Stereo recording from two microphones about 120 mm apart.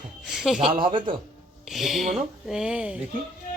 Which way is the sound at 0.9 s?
45° right (ahead or behind).